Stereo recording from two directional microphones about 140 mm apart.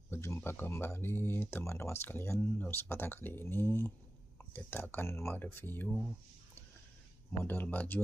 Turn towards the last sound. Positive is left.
turn(degrees=15)  # may be behind; listen again after turning